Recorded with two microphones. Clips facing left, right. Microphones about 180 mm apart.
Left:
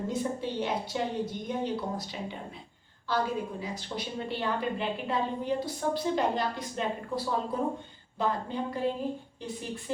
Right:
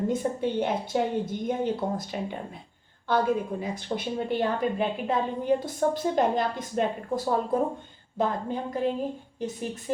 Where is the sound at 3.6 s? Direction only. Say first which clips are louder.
Right 5 dB; 55° right (ahead or behind).